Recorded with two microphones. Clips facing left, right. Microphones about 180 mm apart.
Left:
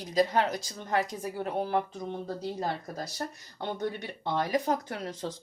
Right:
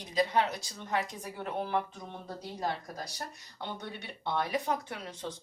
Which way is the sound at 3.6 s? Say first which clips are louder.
Left 7 dB; 45° left (ahead or behind).